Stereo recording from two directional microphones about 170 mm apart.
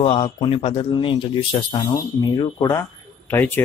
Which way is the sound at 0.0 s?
30° left (ahead or behind).